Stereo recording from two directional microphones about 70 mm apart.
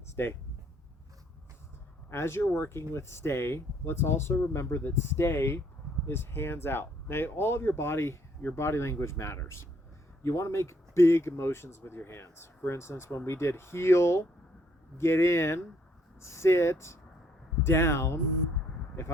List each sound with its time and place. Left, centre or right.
0.2 s speech: left
2.0 s speech: left